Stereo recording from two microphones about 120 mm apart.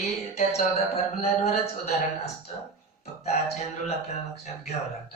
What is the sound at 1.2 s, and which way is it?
Speech, 60° left (ahead or behind).